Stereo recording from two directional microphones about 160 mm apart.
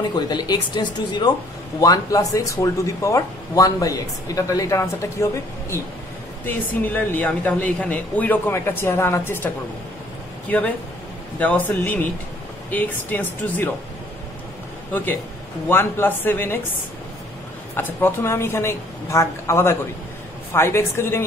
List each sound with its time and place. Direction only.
0.1 s speech: 25° left (ahead or behind)
11.3 s speech: 10° left (ahead or behind)
14.9 s a man's voice: 10° left (ahead or behind)
17.7 s speech: 15° left (ahead or behind)